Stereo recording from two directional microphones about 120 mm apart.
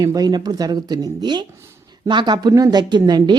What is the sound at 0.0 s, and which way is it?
Speech, 30° right (ahead or behind).